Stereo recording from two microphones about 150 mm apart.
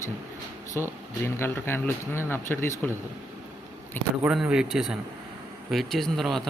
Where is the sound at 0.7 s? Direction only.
15° left (ahead or behind).